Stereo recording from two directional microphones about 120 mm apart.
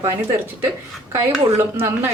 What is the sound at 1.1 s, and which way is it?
Speech, 20° right (ahead or behind).